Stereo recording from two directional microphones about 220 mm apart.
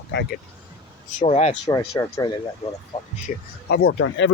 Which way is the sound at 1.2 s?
30° left (ahead or behind).